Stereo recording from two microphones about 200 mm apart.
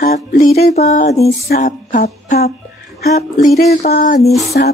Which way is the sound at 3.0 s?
50° left (ahead or behind).